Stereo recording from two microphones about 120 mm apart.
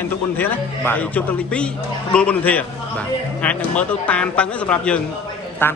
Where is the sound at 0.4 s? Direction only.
15° left (ahead or behind).